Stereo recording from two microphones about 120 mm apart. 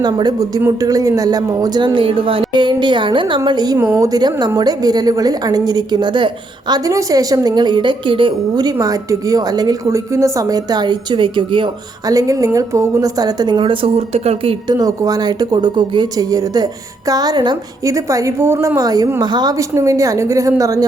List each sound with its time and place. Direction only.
0.0 s a woman's voice: 35° right (ahead or behind)
3.8 s a woman's voice: 25° right (ahead or behind); by 11.7 s 45° right (ahead or behind)
12.0 s a woman's voice: 30° right (ahead or behind); by 14.6 s 55° right (ahead or behind)
14.7 s a woman's voice: 30° right (ahead or behind)
18.8 s a woman's voice: 30° right (ahead or behind)